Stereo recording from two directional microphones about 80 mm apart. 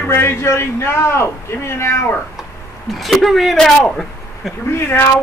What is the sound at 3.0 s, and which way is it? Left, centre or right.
Speech, centre.